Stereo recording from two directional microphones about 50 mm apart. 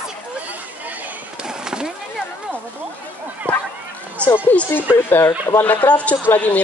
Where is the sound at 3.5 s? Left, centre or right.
Left.